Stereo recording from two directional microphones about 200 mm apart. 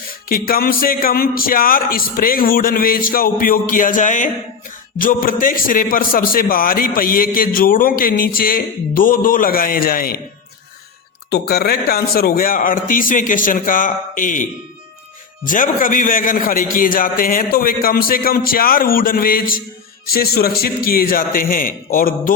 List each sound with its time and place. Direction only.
0.1 s a man's voice: 45° left (ahead or behind)
11.3 s a man's voice: 50° left (ahead or behind)
15.4 s a man's voice: 40° left (ahead or behind)